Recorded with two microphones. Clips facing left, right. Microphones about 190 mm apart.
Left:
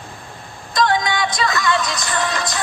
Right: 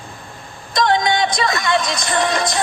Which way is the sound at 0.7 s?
20° right (ahead or behind).